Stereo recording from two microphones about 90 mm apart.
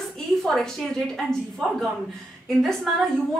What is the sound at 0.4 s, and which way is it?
Speech, 5° left (ahead or behind).